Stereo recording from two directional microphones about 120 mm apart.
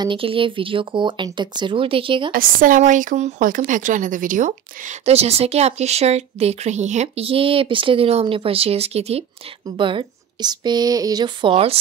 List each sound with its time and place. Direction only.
0.0 s speech: 45° right (ahead or behind)
2.8 s speech: 90° right; by 9.2 s 60° right (ahead or behind)
9.8 s speech: 45° right (ahead or behind)
11.5 s speech: 55° right (ahead or behind)